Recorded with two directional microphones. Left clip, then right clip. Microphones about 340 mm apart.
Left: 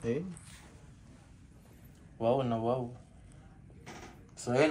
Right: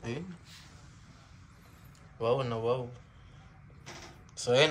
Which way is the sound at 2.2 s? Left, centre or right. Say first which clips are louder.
Even; centre.